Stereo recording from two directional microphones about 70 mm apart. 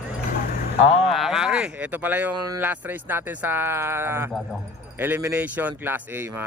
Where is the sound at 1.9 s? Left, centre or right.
Right.